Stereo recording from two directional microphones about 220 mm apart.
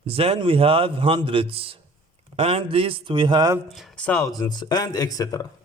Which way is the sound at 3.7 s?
Centre (ahead or behind).